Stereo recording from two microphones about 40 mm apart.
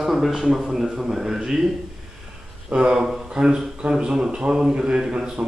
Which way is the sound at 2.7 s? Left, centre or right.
Right.